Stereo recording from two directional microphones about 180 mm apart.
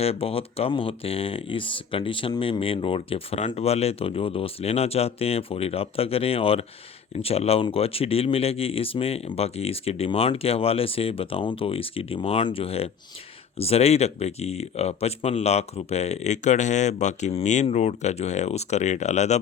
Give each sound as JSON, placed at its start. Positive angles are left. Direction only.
{"t": 0.0, "sound": "speech", "side_deg": 35}